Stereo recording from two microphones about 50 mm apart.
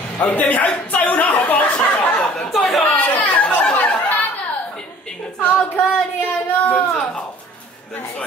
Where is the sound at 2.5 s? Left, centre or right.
Centre.